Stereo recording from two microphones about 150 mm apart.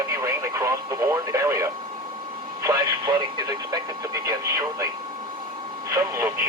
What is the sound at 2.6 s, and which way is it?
Speech, 25° right (ahead or behind).